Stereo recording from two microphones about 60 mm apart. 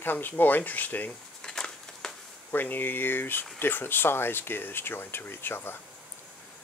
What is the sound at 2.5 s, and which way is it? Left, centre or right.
Speech, left.